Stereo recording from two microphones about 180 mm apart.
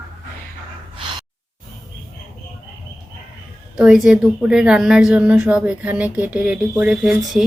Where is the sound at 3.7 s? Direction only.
5° right (ahead or behind).